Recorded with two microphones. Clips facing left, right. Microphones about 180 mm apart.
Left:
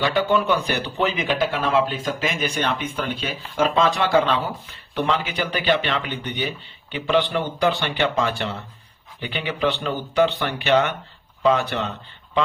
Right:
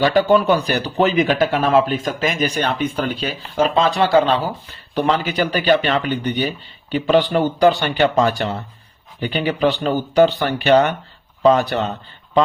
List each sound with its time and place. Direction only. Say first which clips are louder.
0.0 s speech: right 6 dB; 40° right (ahead or behind)